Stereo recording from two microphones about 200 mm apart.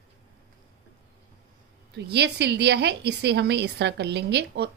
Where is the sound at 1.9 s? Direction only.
55° right (ahead or behind).